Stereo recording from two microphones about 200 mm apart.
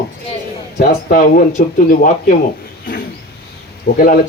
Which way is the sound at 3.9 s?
50° left (ahead or behind).